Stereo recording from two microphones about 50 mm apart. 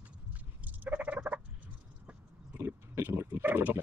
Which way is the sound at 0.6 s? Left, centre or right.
Right.